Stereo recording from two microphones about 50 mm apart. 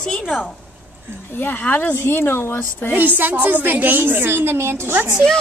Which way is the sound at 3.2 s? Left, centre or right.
Right.